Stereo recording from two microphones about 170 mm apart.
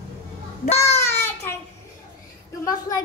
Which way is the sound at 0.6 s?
40° left (ahead or behind).